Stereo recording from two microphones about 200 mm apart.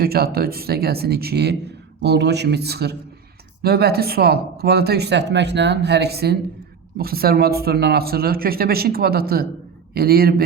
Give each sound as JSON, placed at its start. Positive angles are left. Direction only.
{"t": 0.0, "sound": "speech", "side_deg": -50}